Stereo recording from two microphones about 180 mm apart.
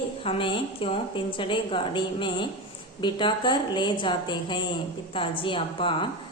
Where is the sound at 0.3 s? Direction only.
30° left (ahead or behind).